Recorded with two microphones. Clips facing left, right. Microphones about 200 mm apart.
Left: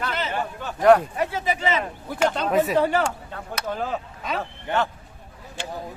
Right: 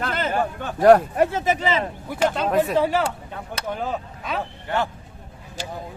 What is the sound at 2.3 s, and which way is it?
Speech, centre (ahead or behind).